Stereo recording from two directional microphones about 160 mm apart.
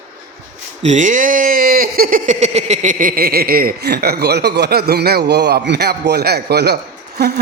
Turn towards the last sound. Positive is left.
turn(degrees=-85)